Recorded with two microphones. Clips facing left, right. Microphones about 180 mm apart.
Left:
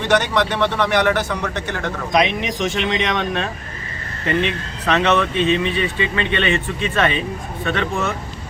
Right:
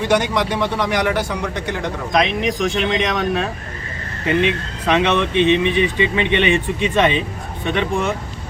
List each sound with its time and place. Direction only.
0.1 s speech: 10° right (ahead or behind)
2.1 s speech: centre (ahead or behind); by 8.1 s 15° right (ahead or behind)